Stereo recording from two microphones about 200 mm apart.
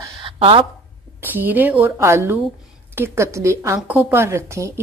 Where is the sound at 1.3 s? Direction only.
10° right (ahead or behind).